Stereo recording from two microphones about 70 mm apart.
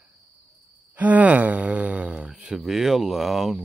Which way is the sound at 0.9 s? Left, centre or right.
Right.